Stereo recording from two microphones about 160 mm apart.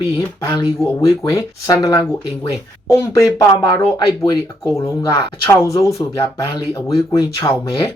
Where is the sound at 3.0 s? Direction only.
20° left (ahead or behind).